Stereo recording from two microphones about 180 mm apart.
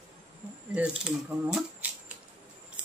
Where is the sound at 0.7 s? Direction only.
5° right (ahead or behind).